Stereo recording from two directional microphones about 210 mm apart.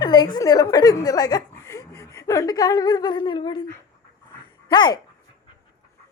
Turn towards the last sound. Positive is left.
turn(degrees=20)  # may be behind; listen again after turning